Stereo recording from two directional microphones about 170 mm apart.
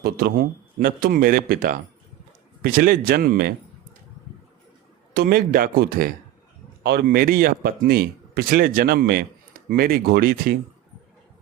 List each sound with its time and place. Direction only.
0.0 s speech: 65° right (ahead or behind)
5.1 s speech: 60° right (ahead or behind)